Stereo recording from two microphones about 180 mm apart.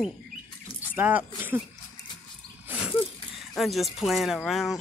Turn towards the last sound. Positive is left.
turn(degrees=0)  # may be behind; listen again after turning